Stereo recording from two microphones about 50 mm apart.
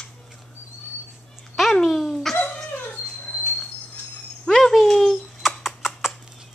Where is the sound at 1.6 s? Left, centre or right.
Centre.